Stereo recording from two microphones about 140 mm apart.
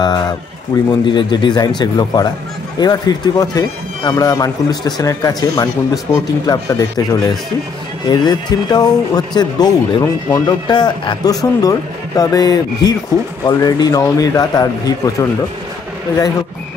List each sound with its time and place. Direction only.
0.0 s a man's voice: 30° left (ahead or behind)
0.7 s speech: 15° left (ahead or behind)
1.0 s a man's voice: 35° left (ahead or behind)